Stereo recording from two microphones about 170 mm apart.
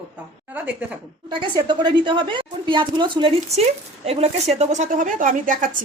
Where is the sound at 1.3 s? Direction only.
25° right (ahead or behind).